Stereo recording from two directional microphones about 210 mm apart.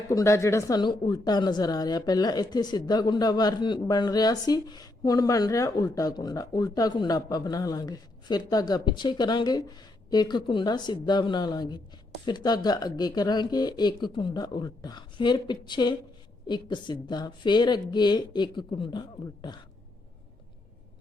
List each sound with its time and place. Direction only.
0.1 s a woman's voice: 15° left (ahead or behind)